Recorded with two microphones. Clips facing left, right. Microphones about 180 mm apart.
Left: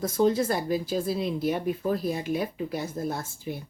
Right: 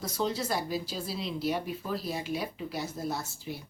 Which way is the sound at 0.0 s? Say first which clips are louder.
Left 8 dB; 50° left (ahead or behind).